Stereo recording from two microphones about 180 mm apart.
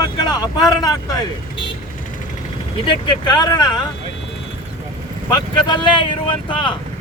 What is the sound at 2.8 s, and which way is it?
Speech, 25° left (ahead or behind).